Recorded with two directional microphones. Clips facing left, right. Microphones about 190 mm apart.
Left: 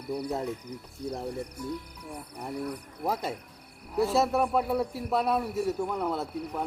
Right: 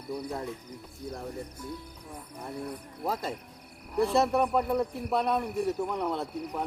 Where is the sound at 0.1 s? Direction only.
20° left (ahead or behind).